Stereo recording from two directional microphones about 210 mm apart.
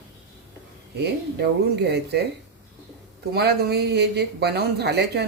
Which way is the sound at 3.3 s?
50° right (ahead or behind).